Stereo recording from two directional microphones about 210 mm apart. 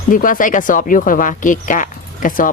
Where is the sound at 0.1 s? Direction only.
40° left (ahead or behind).